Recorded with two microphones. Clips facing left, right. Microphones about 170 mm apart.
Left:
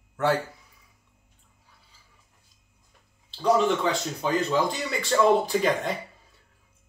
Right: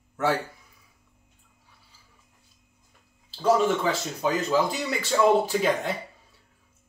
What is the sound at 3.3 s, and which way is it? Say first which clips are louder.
Speech: even; 5° right (ahead or behind).